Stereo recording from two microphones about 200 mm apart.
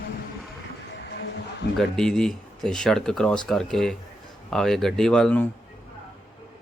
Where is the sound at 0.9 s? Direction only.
60° left (ahead or behind).